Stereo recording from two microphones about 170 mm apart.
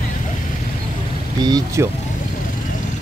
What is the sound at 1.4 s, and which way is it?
Speech, 25° right (ahead or behind).